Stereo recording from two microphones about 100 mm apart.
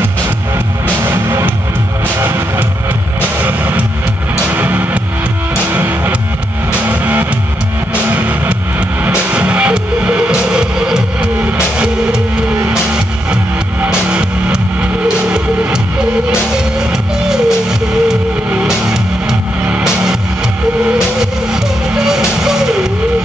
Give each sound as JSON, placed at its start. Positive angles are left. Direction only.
{"t": 1.0, "sound": "music", "side_deg": -25}
{"t": 16.9, "sound": "music", "side_deg": -5}
{"t": 21.2, "sound": "music", "side_deg": -5}